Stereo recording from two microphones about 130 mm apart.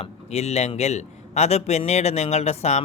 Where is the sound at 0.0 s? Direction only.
55° left (ahead or behind).